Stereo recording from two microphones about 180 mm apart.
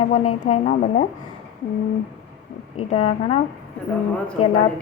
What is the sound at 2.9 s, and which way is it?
Speech, 35° left (ahead or behind).